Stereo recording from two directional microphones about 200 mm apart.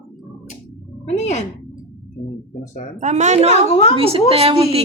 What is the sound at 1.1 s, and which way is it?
Speech, 35° left (ahead or behind).